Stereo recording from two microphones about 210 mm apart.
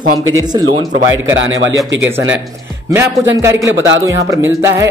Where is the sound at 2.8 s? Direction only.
10° right (ahead or behind).